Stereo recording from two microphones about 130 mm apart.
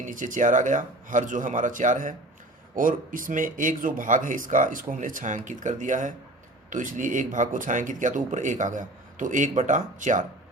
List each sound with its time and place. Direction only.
0.0 s speech: 90° right